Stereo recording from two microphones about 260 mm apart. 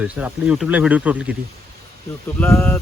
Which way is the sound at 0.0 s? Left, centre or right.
Centre.